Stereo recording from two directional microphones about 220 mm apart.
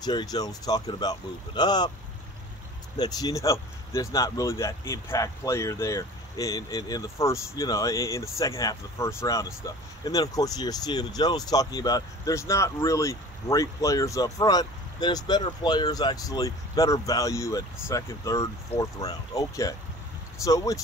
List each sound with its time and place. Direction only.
0.0 s speech: 20° left (ahead or behind)
3.0 s speech: 15° left (ahead or behind)